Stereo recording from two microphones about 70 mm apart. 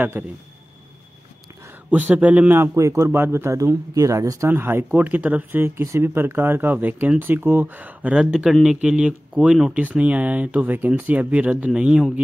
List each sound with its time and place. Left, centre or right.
0.2 s speech: right
1.9 s speech: right
2.7 s speech: right
3.1 s speech: right
3.5 s speech: right
4.5 s speech: right
4.9 s speech: right
5.6 s speech: right; by 9.8 s centre
9.8 s speech: right